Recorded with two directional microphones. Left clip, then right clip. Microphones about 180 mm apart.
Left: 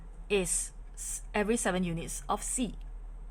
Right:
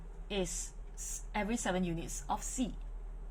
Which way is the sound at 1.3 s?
60° left (ahead or behind).